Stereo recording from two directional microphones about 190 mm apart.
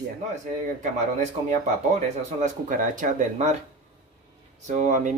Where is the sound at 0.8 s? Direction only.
40° right (ahead or behind).